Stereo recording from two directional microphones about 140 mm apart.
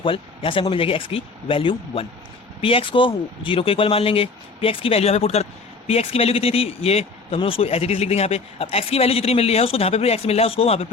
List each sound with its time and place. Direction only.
0.0 s a man's voice: 40° left (ahead or behind)